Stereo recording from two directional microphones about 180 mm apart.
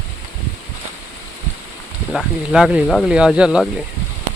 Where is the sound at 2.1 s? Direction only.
5° right (ahead or behind).